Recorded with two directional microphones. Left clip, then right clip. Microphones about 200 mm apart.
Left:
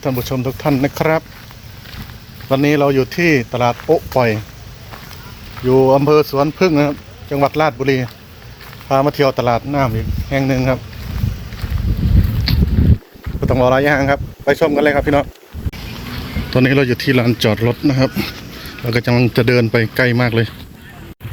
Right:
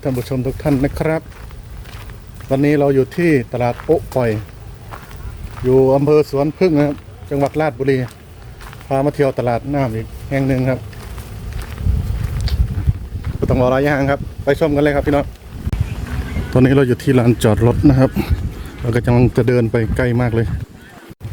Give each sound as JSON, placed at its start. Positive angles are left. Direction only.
{"t": 0.0, "sound": "speech", "side_deg": -5}
{"t": 2.5, "sound": "speech", "side_deg": 0}
{"t": 3.8, "sound": "speech", "side_deg": 10}
{"t": 5.6, "sound": "speech", "side_deg": 10}
{"t": 12.5, "sound": "a sound", "side_deg": -5}
{"t": 13.5, "sound": "speech", "side_deg": -5}
{"t": 16.5, "sound": "speech", "side_deg": -20}